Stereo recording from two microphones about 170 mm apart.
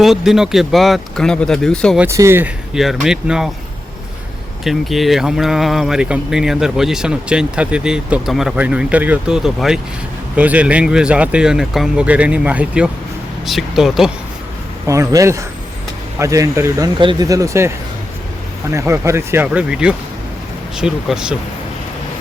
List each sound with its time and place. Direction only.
0.0 s speech: centre (ahead or behind)
2.0 s speech: 15° right (ahead or behind)
2.7 s speech: centre (ahead or behind)
4.6 s speech: centre (ahead or behind)
14.8 s speech: 20° right (ahead or behind)
18.7 s speech: 15° right (ahead or behind)